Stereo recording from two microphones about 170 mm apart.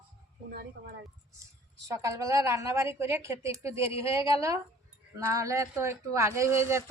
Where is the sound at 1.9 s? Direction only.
20° right (ahead or behind).